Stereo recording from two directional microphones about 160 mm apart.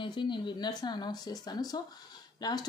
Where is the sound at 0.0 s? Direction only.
30° left (ahead or behind).